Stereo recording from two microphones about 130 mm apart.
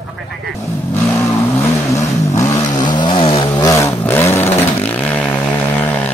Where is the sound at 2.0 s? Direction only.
25° left (ahead or behind).